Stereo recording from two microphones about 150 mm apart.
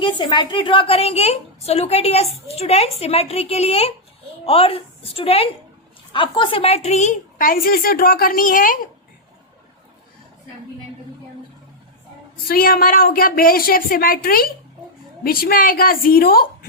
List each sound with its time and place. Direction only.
0.0 s a woman's voice: 30° left (ahead or behind); by 7.2 s 50° left (ahead or behind)
7.3 s speech: 70° left (ahead or behind)
12.5 s speech: 75° left (ahead or behind)